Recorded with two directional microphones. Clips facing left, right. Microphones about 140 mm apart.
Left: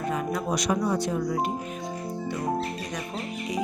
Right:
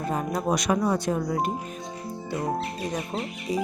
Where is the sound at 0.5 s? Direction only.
55° right (ahead or behind).